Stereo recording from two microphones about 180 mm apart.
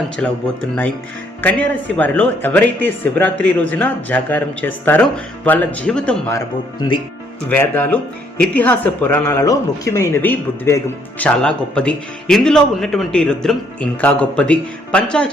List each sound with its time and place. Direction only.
0.2 s speech: 5° left (ahead or behind)
1.4 s speech: 10° left (ahead or behind)
6.7 s speech: 25° left (ahead or behind)
7.4 s speech: 10° left (ahead or behind)